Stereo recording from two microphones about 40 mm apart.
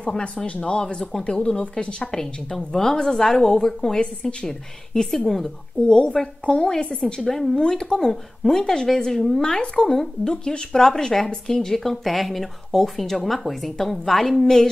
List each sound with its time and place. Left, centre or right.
0.5 s speech: left
1.2 s speech: left; by 4.0 s centre
4.0 s speech: left
5.1 s a woman's voice: centre
5.8 s speech: left
7.2 s speech: centre
7.5 s speech: centre
9.4 s speech: left